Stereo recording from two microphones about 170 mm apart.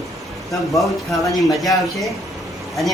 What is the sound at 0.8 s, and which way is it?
Speech, centre (ahead or behind).